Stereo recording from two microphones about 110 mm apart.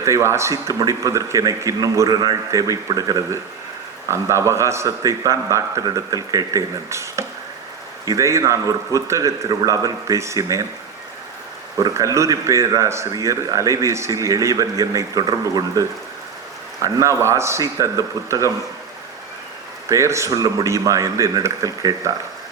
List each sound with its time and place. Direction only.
0.0 s a man's voice: 25° right (ahead or behind)
11.8 s a man's voice: 30° right (ahead or behind)
19.9 s a man's voice: 25° right (ahead or behind)